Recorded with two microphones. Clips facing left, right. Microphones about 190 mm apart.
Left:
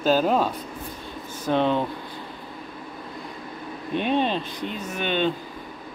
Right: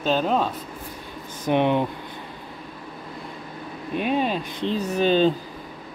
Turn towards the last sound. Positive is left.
turn(degrees=-35)  # may be behind; listen again after turning